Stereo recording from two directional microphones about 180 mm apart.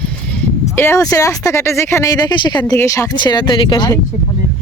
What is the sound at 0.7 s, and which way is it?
Speech, 15° left (ahead or behind).